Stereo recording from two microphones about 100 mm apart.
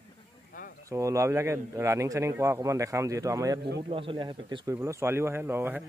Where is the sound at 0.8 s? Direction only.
30° right (ahead or behind).